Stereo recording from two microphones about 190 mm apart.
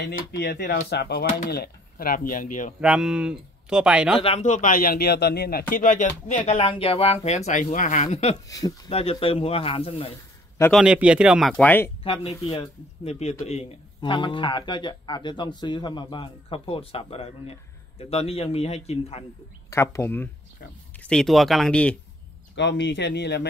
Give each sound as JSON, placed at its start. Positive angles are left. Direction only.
{"t": 0.1, "sound": "speech", "side_deg": 60}
{"t": 2.8, "sound": "speech", "side_deg": -5}
{"t": 4.2, "sound": "a man's voice", "side_deg": 35}
{"t": 8.5, "sound": "speech", "side_deg": 20}
{"t": 10.7, "sound": "speech", "side_deg": -5}
{"t": 12.0, "sound": "speech", "side_deg": 30}
{"t": 19.7, "sound": "speech", "side_deg": 15}
{"t": 22.6, "sound": "speech", "side_deg": 70}